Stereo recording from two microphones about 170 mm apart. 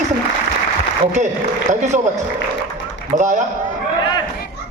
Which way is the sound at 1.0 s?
45° right (ahead or behind).